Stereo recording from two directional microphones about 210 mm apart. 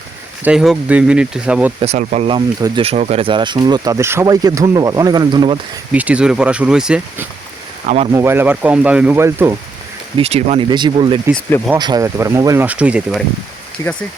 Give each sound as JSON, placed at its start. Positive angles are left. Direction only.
{"t": 0.4, "sound": "speech", "side_deg": 0}
{"t": 1.8, "sound": "speech", "side_deg": -35}
{"t": 5.9, "sound": "speech", "side_deg": -5}
{"t": 7.9, "sound": "speech", "side_deg": -30}
{"t": 8.1, "sound": "speech", "side_deg": -10}
{"t": 10.2, "sound": "speech", "side_deg": -30}